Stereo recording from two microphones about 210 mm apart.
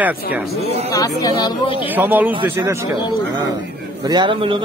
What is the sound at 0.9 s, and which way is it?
Speech, 15° left (ahead or behind).